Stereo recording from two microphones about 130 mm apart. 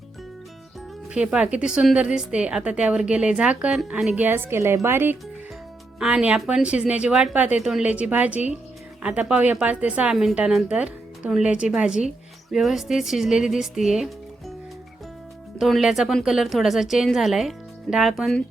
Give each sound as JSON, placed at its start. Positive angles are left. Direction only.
{"t": 1.1, "sound": "a woman's voice", "side_deg": -10}
{"t": 6.0, "sound": "a woman's voice", "side_deg": -5}
{"t": 15.5, "sound": "speech", "side_deg": 0}